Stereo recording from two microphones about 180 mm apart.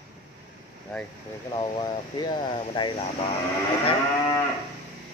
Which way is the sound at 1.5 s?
25° left (ahead or behind).